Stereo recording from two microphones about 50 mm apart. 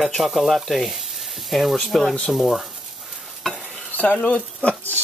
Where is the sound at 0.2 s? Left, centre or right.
Centre.